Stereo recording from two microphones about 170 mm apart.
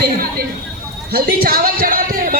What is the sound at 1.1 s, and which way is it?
Speech, 65° right (ahead or behind).